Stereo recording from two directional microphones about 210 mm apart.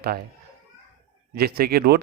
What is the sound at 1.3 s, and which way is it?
Speech, 50° right (ahead or behind).